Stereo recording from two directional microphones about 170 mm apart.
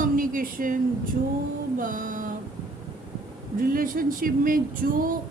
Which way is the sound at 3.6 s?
55° right (ahead or behind).